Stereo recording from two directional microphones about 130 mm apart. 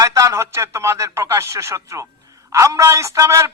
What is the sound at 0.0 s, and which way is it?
A man's voice, 25° right (ahead or behind).